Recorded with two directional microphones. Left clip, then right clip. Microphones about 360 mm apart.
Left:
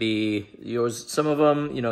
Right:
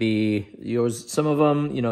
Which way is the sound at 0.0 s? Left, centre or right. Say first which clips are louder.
Right 1 dB; centre.